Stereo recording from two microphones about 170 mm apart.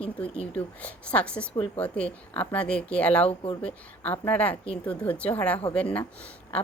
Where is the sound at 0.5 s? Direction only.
10° left (ahead or behind).